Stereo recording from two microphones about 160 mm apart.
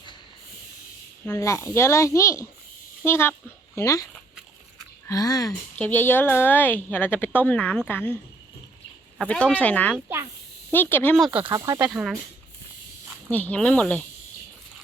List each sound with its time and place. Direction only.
1.2 s a woman's voice: 15° left (ahead or behind)
5.0 s speech: 20° left (ahead or behind)
5.7 s a woman's voice: 10° left (ahead or behind)
11.2 s speech: 10° right (ahead or behind)
11.4 s speech: 25° right (ahead or behind)
11.8 s speech: 5° right (ahead or behind)
13.3 s a woman's voice: 10° left (ahead or behind)